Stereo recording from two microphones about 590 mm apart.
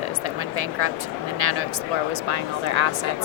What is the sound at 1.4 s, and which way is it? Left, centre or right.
Speech, right.